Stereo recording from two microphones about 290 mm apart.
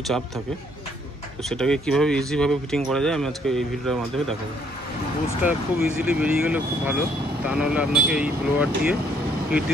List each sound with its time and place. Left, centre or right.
1.4 s speech: centre
5.4 s speech: centre